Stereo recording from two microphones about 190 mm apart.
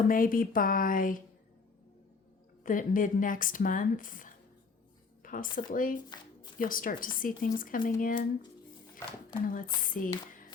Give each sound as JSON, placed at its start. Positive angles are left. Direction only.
{"t": 0.1, "sound": "speech", "side_deg": 45}
{"t": 2.6, "sound": "speech", "side_deg": 45}
{"t": 9.5, "sound": "speech", "side_deg": 45}